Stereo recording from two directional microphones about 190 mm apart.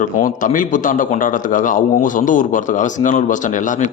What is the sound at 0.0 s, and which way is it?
A man's voice, 45° left (ahead or behind).